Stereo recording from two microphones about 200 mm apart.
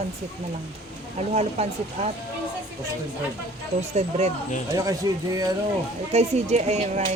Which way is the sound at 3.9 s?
30° right (ahead or behind).